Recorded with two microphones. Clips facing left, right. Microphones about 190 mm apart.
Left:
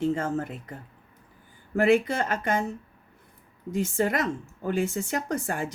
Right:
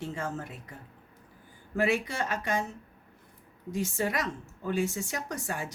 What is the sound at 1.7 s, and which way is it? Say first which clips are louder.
Speech: left 7 dB; 55° left (ahead or behind).